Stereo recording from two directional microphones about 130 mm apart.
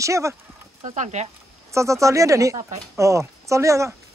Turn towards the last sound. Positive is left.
turn(degrees=-25)  # may be behind; listen again after turning